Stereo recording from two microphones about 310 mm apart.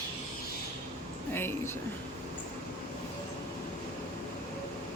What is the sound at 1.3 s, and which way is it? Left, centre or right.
Speech, centre.